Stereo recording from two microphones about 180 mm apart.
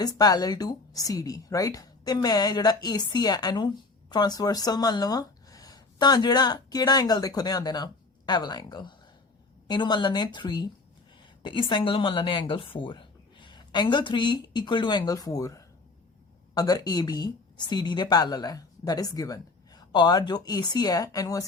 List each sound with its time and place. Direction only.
0.0 s a woman's voice: 20° left (ahead or behind)